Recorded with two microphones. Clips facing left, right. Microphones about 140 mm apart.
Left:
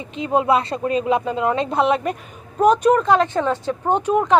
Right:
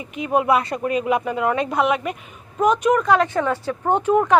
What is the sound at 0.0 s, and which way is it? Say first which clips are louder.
A woman's voice: left 1 dB; 25° left (ahead or behind).